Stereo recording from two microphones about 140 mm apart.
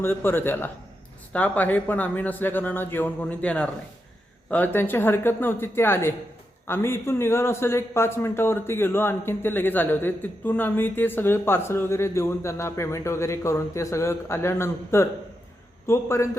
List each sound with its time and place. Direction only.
0.0 s a man's voice: 15° left (ahead or behind)